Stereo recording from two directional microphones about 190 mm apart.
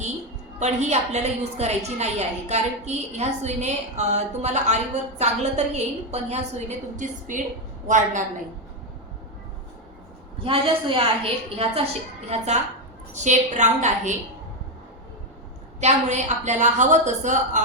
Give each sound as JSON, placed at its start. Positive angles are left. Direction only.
{"t": 0.6, "sound": "a woman's voice", "side_deg": -35}
{"t": 10.4, "sound": "a woman's voice", "side_deg": -30}
{"t": 15.8, "sound": "a woman's voice", "side_deg": -40}